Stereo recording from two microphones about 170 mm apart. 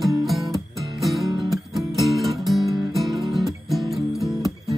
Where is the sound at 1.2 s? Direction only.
25° right (ahead or behind).